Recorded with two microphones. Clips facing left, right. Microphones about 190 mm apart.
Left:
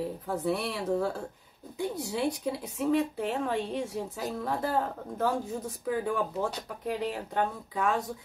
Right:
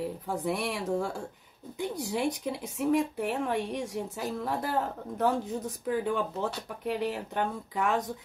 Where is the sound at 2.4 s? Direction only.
20° right (ahead or behind).